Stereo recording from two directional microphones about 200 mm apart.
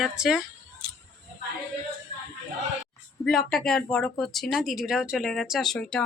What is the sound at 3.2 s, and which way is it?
Speech, centre (ahead or behind).